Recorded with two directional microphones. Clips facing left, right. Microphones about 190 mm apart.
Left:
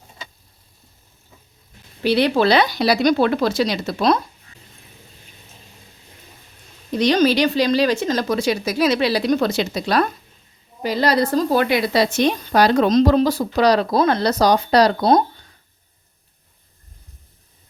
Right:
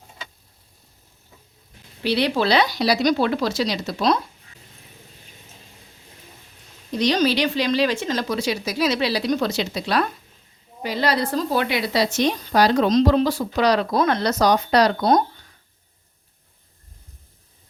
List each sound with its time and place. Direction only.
2.0 s speech: 50° left (ahead or behind)
7.0 s speech: 50° left (ahead or behind); by 15.2 s 35° left (ahead or behind)